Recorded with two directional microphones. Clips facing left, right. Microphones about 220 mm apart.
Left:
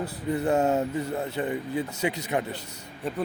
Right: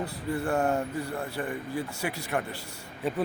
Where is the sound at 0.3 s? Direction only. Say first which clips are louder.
Left 4 dB; 20° left (ahead or behind).